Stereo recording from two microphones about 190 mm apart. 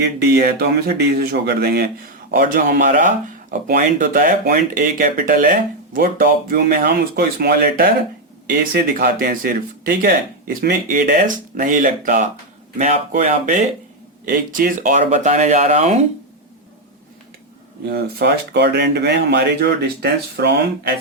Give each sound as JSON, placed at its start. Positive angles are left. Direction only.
{"t": 0.0, "sound": "speech", "side_deg": -55}
{"t": 17.8, "sound": "speech", "side_deg": -55}